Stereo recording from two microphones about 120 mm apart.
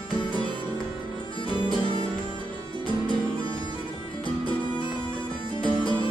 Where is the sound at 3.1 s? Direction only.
45° left (ahead or behind).